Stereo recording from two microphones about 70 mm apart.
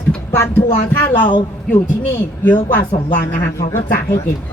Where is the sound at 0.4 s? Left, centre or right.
Left.